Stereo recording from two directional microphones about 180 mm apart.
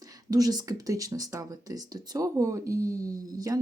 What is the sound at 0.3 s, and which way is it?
Speech, 20° right (ahead or behind).